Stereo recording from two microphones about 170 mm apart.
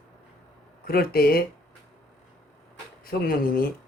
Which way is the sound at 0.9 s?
60° left (ahead or behind).